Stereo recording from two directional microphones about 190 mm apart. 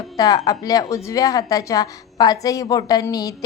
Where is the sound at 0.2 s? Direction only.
20° left (ahead or behind).